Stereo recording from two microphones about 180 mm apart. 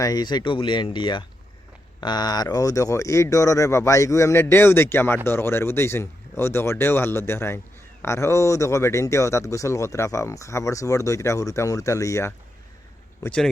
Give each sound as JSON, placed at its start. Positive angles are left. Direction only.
{"t": 0.0, "sound": "speech", "side_deg": 20}
{"t": 13.2, "sound": "speech", "side_deg": 5}